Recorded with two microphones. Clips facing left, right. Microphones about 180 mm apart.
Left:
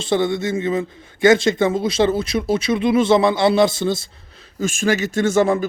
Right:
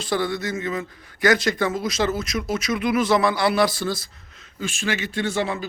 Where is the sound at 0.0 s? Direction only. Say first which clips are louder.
Left 5 dB; 25° left (ahead or behind).